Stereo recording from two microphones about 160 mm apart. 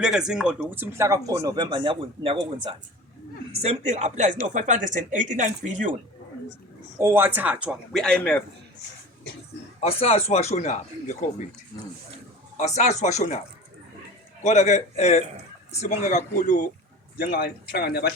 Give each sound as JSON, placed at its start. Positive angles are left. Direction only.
{"t": 0.0, "sound": "speech", "side_deg": -5}
{"t": 7.0, "sound": "a man's voice", "side_deg": -15}
{"t": 9.8, "sound": "speech", "side_deg": 40}
{"t": 11.7, "sound": "speech", "side_deg": 30}
{"t": 12.5, "sound": "speech", "side_deg": 45}
{"t": 14.4, "sound": "speech", "side_deg": 45}
{"t": 17.2, "sound": "speech", "side_deg": 65}